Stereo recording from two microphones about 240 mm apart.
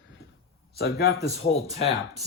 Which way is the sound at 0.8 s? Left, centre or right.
Left.